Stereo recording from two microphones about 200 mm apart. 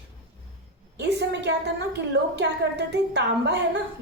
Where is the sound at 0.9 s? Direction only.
60° right (ahead or behind).